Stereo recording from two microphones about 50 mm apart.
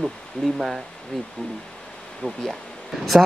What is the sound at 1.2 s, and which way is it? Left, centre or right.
Speech, centre.